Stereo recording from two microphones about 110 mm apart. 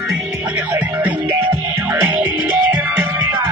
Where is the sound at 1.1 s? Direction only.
40° right (ahead or behind).